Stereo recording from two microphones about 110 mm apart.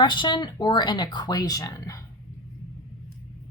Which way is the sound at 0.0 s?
45° left (ahead or behind).